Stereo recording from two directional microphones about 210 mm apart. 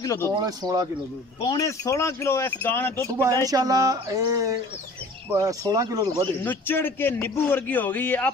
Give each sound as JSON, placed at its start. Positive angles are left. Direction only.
{"t": 0.0, "sound": "speech", "side_deg": 15}
{"t": 0.5, "sound": "speech", "side_deg": -20}
{"t": 1.4, "sound": "a man's voice", "side_deg": 20}
{"t": 3.3, "sound": "speech", "side_deg": -15}
{"t": 6.4, "sound": "a man's voice", "side_deg": 10}